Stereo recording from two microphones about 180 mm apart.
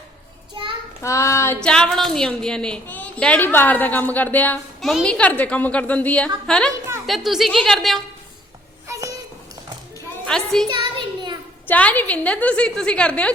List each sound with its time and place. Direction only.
1.0 s a woman's voice: 15° left (ahead or behind)
1.6 s a woman's voice: 5° left (ahead or behind)
8.9 s a sound: 15° right (ahead or behind)
10.2 s a woman's voice: 5° left (ahead or behind)
10.7 s a sound: 25° right (ahead or behind)
11.7 s a woman's voice: 10° left (ahead or behind)